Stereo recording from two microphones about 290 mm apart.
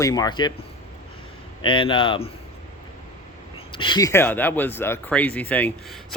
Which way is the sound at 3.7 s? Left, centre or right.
Centre.